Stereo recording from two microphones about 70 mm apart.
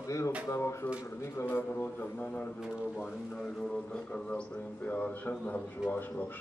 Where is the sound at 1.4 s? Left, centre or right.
Left.